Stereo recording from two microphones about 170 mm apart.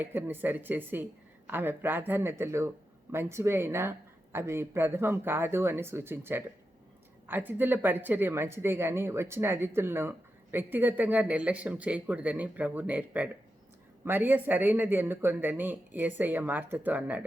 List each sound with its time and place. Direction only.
0.0 s speech: 10° right (ahead or behind)